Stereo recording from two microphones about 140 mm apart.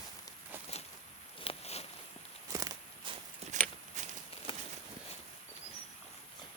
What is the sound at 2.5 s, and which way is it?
Walk, 25° right (ahead or behind).